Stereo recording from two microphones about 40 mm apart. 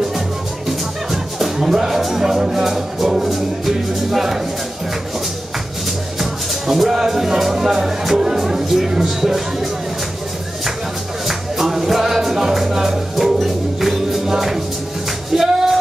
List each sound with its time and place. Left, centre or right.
0.7 s speech: centre
6.7 s speech: centre
11.2 s music: centre